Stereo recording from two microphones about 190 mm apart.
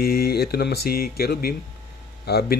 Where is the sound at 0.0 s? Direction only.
55° left (ahead or behind).